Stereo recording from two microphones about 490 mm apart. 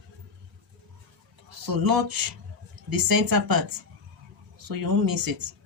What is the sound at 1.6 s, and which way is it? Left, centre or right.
Speech, right.